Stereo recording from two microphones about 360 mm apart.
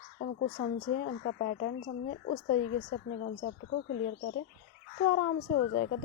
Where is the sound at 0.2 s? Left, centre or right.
Left.